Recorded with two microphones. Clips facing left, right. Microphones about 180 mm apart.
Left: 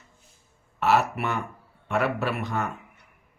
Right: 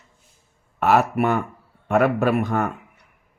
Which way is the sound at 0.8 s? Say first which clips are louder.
Right 5 dB; 50° right (ahead or behind).